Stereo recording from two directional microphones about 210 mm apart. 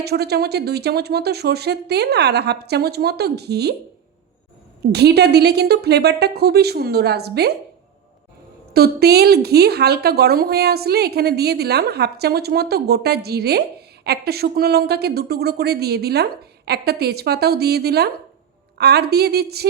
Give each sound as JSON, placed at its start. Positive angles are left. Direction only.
{"t": 0.0, "sound": "speech", "side_deg": -50}
{"t": 4.8, "sound": "speech", "side_deg": -50}
{"t": 8.7, "sound": "speech", "side_deg": -50}